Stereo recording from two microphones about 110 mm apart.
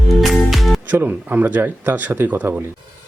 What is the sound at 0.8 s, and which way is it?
Speech, 15° right (ahead or behind).